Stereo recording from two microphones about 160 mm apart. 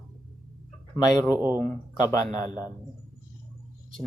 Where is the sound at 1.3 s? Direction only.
10° right (ahead or behind).